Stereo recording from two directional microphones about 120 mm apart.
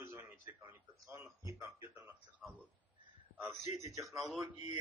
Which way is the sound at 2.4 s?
Centre (ahead or behind).